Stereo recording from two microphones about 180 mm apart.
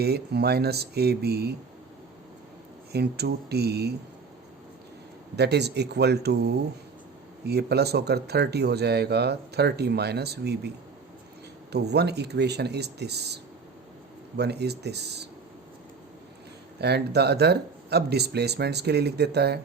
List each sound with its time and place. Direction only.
0.0 s speech: 65° right (ahead or behind)
2.9 s speech: 65° right (ahead or behind)
5.4 s speech: 70° right (ahead or behind)
11.7 s speech: 65° right (ahead or behind)
16.7 s speech: 65° right (ahead or behind)